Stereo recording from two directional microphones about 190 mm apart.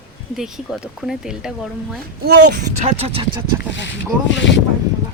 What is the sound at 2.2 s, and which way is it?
Speech, 60° right (ahead or behind).